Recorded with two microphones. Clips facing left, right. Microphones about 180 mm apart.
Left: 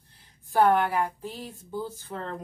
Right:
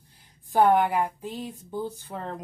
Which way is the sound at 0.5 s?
15° right (ahead or behind).